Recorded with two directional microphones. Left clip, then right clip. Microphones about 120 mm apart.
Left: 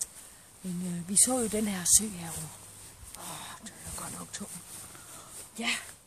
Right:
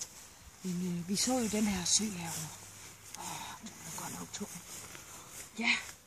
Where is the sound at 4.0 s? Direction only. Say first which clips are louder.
Left 1 dB; 20° left (ahead or behind).